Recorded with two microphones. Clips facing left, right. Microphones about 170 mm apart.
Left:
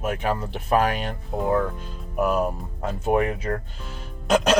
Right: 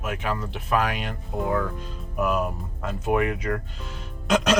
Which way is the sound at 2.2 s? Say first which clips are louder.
Left 2 dB; 30° left (ahead or behind).